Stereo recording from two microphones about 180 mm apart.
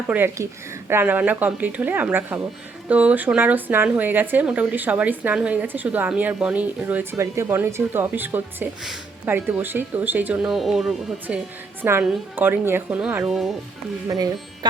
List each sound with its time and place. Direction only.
0.1 s speech: 10° right (ahead or behind)
14.1 s speech: 20° right (ahead or behind)